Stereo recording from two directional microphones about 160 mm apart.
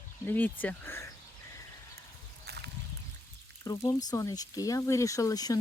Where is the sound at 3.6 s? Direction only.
25° left (ahead or behind).